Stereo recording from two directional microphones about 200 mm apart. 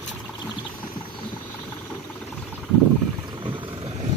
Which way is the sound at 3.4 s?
25° right (ahead or behind).